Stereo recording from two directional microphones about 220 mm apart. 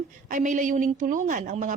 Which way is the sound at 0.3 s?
35° right (ahead or behind).